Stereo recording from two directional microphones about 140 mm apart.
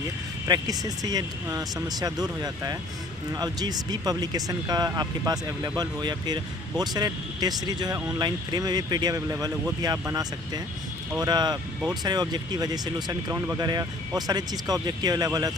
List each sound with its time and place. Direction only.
0.4 s speech: 25° right (ahead or behind)